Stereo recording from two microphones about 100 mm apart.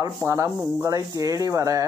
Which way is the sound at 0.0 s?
35° right (ahead or behind).